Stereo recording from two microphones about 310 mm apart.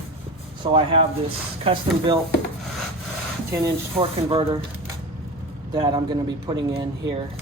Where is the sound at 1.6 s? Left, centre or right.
Centre.